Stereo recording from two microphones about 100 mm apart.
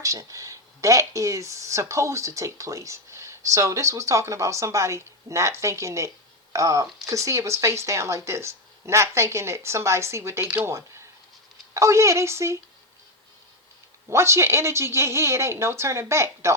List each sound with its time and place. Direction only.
0.0 s speech: 35° right (ahead or behind)
14.1 s speech: 30° right (ahead or behind)